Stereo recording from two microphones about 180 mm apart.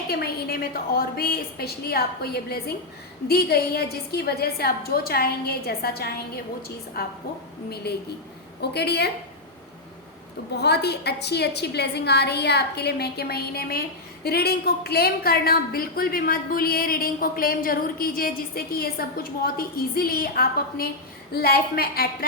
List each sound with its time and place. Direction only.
0.1 s a woman's voice: 60° left (ahead or behind)
10.6 s a woman's voice: 65° left (ahead or behind)